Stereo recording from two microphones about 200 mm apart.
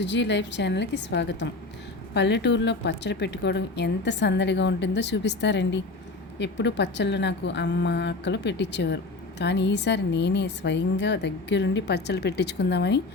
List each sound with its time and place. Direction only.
0.0 s a woman's voice: 60° left (ahead or behind)